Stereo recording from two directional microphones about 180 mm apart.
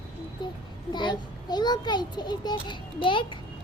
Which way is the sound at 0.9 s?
25° left (ahead or behind).